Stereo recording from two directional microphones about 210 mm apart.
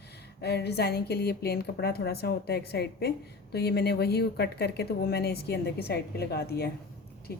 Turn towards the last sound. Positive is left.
turn(degrees=50)  # may be behind; listen again after turning